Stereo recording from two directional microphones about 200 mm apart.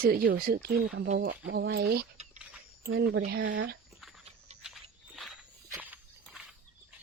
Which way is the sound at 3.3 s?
65° right (ahead or behind).